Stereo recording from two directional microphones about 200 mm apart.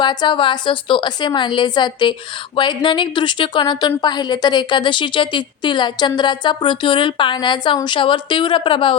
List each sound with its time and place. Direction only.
0.0 s a woman's voice: 20° left (ahead or behind)